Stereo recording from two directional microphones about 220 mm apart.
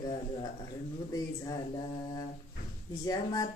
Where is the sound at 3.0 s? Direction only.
15° left (ahead or behind).